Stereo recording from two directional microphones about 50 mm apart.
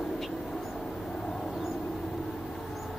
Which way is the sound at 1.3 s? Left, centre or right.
Centre.